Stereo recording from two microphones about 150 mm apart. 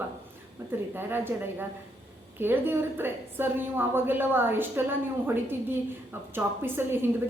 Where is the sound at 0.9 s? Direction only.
15° right (ahead or behind).